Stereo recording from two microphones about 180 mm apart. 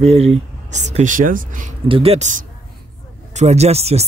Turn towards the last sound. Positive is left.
turn(degrees=-35)  # may be behind; listen again after turning